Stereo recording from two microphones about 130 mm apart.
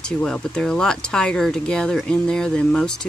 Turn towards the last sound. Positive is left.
turn(degrees=5)  # may be behind; listen again after turning